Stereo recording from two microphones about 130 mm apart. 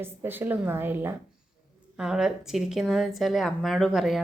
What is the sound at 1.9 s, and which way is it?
A woman's voice, 5° right (ahead or behind).